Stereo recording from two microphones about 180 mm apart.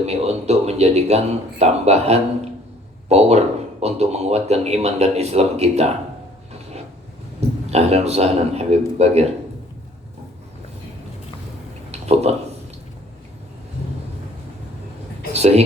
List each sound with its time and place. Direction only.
0.0 s speech: 35° right (ahead or behind)
7.7 s speech: 35° right (ahead or behind)
11.9 s a sound: 35° right (ahead or behind)
15.3 s speech: 35° right (ahead or behind)